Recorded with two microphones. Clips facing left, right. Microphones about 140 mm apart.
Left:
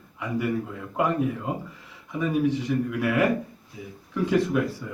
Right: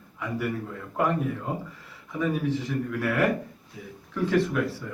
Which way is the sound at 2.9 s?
10° left (ahead or behind).